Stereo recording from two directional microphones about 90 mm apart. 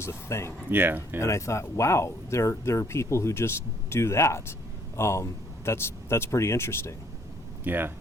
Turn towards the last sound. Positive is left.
turn(degrees=-20)  # may be behind; listen again after turning